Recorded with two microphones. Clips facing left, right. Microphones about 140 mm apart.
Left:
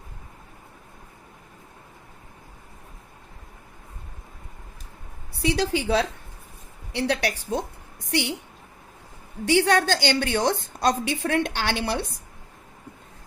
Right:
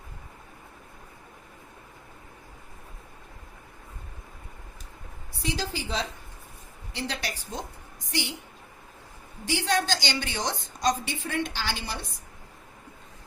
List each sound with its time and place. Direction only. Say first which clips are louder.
5.4 s a woman's voice: left 8 dB; 70° left (ahead or behind)
9.5 s a woman's voice: left 7 dB; 65° left (ahead or behind)